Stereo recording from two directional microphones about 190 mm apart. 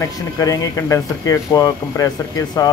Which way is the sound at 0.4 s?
20° left (ahead or behind).